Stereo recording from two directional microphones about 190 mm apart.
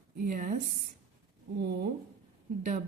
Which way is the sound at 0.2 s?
45° right (ahead or behind).